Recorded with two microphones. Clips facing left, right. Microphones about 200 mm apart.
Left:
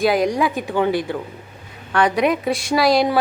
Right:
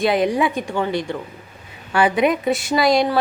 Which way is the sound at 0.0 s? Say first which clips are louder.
Even; centre (ahead or behind).